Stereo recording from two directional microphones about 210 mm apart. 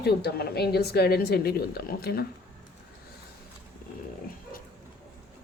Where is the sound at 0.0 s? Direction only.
50° left (ahead or behind).